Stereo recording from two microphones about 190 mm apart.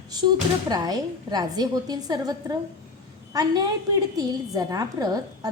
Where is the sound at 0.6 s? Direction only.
20° right (ahead or behind).